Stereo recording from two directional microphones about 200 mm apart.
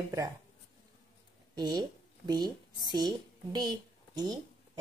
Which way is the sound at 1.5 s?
20° right (ahead or behind).